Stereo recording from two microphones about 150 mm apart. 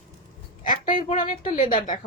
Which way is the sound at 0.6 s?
60° left (ahead or behind).